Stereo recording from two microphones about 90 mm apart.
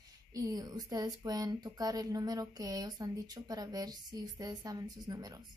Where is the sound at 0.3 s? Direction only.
45° right (ahead or behind).